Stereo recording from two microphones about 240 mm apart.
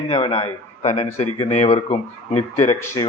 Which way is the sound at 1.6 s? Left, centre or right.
Left.